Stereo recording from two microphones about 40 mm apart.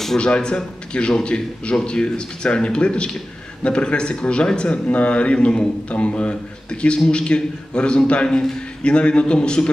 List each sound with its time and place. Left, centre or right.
0.2 s a man's voice: left